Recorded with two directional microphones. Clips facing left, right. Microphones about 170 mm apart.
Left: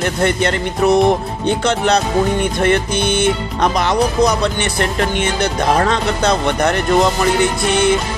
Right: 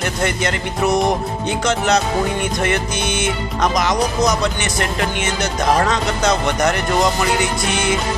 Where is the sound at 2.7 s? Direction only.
60° left (ahead or behind).